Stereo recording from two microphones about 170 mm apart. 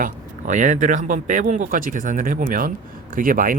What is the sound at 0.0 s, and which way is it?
Speech, 50° right (ahead or behind).